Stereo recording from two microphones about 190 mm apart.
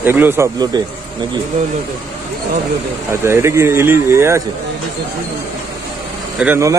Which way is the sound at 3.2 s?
15° right (ahead or behind).